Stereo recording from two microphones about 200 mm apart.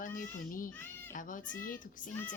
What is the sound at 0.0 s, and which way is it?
Speech, 45° left (ahead or behind).